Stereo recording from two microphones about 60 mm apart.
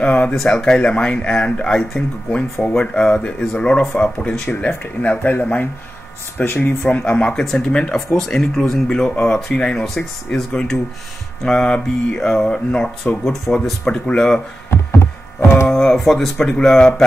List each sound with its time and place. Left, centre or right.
0.0 s speech: centre
6.3 s speech: left
6.8 s speech: left
15.7 s speech: centre
16.4 s speech: centre